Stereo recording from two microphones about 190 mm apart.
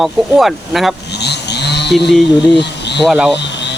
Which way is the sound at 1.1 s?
60° left (ahead or behind).